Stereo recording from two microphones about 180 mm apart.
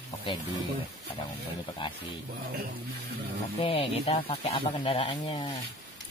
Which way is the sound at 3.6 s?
30° left (ahead or behind).